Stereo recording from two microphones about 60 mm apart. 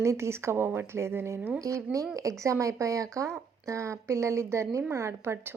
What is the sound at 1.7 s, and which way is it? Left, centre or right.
Speech, right.